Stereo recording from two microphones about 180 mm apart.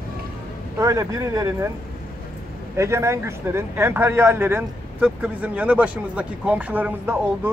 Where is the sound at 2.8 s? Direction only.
15° right (ahead or behind).